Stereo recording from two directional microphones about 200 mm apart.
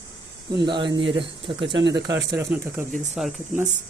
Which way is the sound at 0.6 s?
25° right (ahead or behind).